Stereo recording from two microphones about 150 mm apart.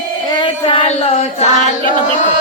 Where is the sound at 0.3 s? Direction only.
30° left (ahead or behind); by 1.7 s 55° left (ahead or behind).